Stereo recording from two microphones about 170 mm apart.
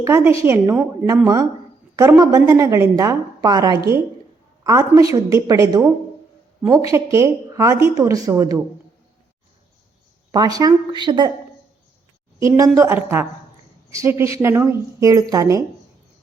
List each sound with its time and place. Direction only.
0.0 s a woman's voice: 15° right (ahead or behind)
6.9 s a woman's voice: 15° right (ahead or behind)
10.3 s speech: 20° right (ahead or behind)
12.4 s a woman's voice: 20° right (ahead or behind)